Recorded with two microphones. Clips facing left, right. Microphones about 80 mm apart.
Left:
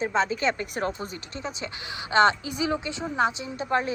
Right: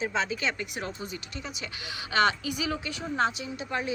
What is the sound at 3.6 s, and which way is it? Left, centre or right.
Speech, left.